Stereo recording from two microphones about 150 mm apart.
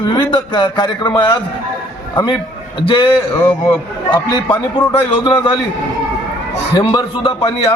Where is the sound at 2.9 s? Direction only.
35° left (ahead or behind).